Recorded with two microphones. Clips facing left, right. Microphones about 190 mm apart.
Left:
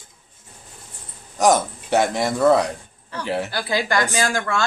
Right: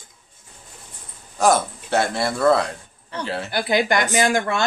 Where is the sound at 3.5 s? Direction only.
20° right (ahead or behind).